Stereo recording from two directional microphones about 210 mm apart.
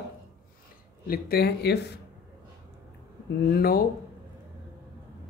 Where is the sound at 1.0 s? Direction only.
45° left (ahead or behind).